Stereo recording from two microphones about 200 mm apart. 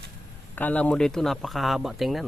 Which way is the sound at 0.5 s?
10° left (ahead or behind).